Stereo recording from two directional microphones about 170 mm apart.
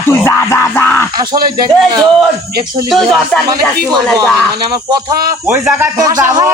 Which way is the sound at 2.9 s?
5° left (ahead or behind).